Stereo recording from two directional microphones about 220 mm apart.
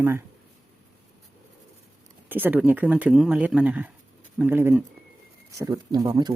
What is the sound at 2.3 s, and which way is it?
Speech, 5° right (ahead or behind).